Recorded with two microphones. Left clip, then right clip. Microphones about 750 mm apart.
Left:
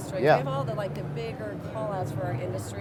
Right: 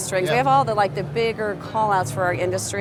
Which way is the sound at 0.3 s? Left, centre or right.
Right.